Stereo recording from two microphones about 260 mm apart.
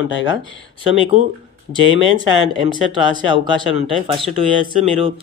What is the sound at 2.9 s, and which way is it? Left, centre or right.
Speech, centre.